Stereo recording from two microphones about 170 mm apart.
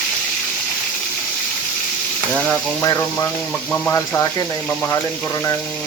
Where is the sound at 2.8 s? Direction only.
20° left (ahead or behind).